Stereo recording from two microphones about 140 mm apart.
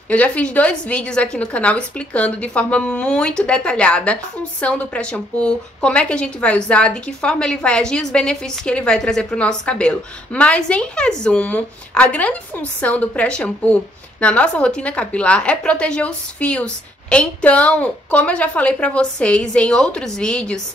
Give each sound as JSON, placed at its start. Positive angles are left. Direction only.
{"t": 0.1, "sound": "a woman's voice", "side_deg": 10}